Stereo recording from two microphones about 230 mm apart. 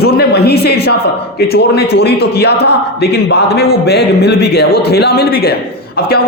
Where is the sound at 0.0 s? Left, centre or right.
Left.